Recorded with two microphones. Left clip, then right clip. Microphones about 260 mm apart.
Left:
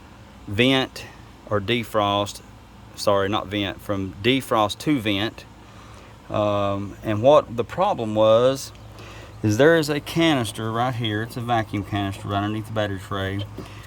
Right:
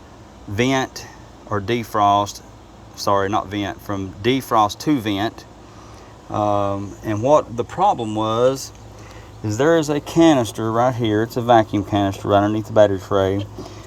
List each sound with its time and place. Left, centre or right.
1.5 s speech: centre
13.1 s speech: centre